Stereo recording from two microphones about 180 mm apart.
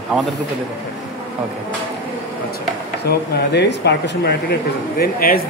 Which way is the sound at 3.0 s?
65° left (ahead or behind).